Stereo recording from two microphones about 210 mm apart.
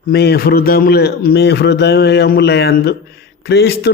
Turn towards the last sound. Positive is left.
turn(degrees=50)  # may be behind; listen again after turning